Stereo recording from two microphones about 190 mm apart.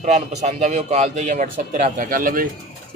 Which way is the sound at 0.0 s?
40° right (ahead or behind).